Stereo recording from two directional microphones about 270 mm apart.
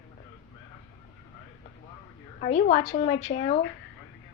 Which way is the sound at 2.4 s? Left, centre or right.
Left.